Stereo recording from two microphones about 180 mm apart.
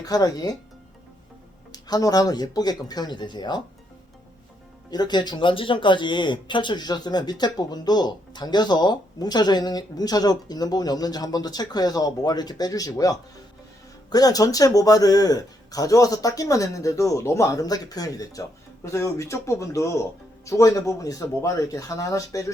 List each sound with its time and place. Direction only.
0.0 s speech: 20° left (ahead or behind)
1.7 s speech: 20° left (ahead or behind)
4.9 s speech: 25° left (ahead or behind)